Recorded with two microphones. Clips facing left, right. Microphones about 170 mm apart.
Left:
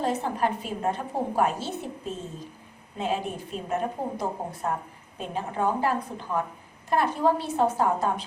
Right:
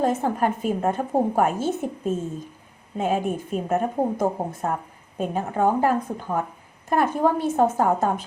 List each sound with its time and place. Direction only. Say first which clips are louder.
0.0 s a woman's voice: right 4 dB; 50° right (ahead or behind)